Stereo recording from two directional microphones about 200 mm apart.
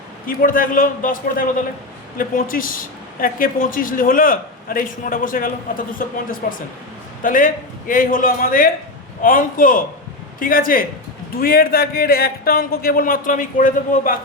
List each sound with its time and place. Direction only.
0.3 s speech: 45° left (ahead or behind)